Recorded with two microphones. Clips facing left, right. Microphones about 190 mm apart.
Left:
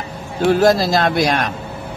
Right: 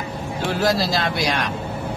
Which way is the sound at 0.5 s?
50° left (ahead or behind).